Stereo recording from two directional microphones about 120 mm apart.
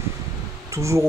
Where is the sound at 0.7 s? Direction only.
25° right (ahead or behind).